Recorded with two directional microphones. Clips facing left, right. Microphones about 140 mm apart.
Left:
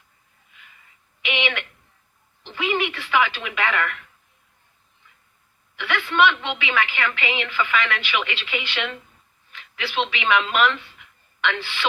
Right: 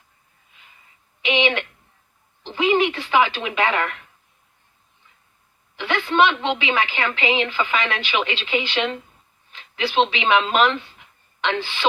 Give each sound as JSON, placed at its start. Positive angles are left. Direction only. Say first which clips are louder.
{"t": 1.2, "sound": "a woman's voice", "louder": "right 6 dB", "side_deg": -30}
{"t": 5.7, "sound": "a woman's voice", "louder": "right 3 dB", "side_deg": -30}